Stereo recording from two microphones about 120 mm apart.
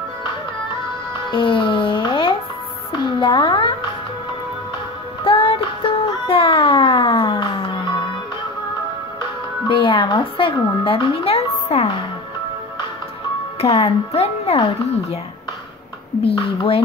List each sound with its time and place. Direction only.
1.3 s music: 45° left (ahead or behind)
5.2 s music: 50° left (ahead or behind)
9.7 s speech: 45° left (ahead or behind)
11.2 s a child's voice: 60° left (ahead or behind)
13.6 s a child's voice: 60° left (ahead or behind)